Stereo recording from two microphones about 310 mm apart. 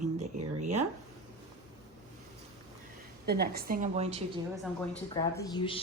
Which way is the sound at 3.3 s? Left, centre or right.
Right.